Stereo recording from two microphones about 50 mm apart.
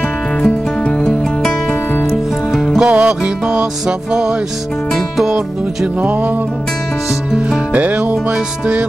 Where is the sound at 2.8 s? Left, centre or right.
Right.